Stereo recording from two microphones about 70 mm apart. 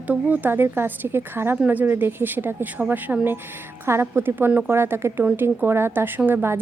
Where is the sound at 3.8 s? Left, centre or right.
Right.